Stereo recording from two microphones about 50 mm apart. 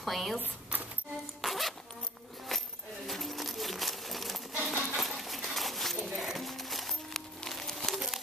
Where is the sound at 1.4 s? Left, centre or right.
Centre.